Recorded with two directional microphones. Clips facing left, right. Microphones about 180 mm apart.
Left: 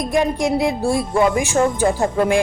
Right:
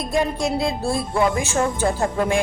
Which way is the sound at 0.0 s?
15° left (ahead or behind).